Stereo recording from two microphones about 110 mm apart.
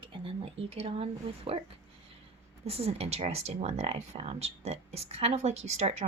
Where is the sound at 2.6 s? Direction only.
65° right (ahead or behind).